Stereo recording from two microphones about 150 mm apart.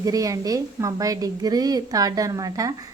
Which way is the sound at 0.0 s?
25° right (ahead or behind).